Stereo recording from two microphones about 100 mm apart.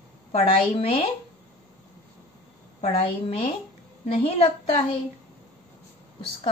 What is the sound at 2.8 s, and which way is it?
Speech, 80° left.